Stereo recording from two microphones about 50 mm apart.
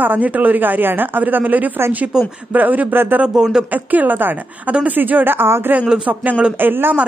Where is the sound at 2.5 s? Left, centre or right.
Right.